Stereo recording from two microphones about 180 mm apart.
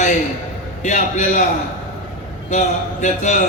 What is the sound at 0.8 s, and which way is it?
Speech, 40° left (ahead or behind).